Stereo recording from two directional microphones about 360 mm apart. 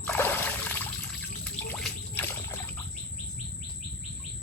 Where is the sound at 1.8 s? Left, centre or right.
Centre.